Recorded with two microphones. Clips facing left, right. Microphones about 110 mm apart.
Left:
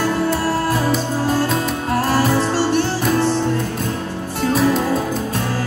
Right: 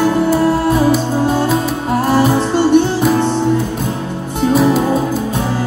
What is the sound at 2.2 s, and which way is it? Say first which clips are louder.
Music: right 4 dB; 20° right (ahead or behind).